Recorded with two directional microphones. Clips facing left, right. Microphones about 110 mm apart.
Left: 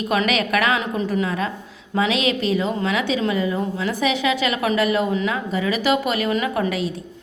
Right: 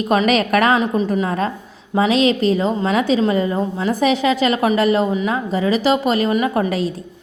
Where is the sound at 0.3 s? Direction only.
40° right (ahead or behind).